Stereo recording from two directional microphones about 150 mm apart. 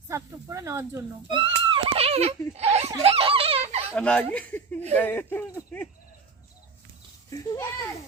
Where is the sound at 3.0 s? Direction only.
40° right (ahead or behind).